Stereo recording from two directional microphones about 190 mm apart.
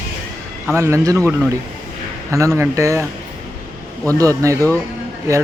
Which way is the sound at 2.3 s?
15° right (ahead or behind).